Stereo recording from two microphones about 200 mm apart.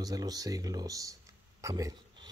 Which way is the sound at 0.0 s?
20° right (ahead or behind).